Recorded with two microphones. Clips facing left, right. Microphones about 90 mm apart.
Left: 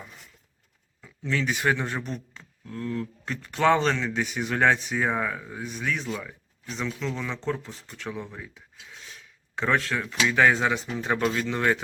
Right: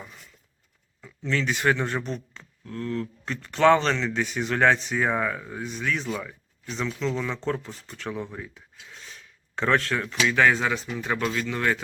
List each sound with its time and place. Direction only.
1.0 s speech: 5° left (ahead or behind); by 11.6 s 25° left (ahead or behind)